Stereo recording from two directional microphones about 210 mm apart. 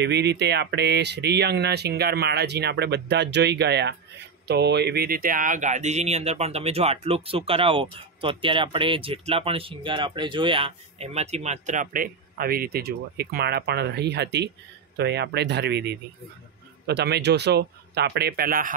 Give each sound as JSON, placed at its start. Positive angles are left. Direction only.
{"t": 0.0, "sound": "speech", "side_deg": -55}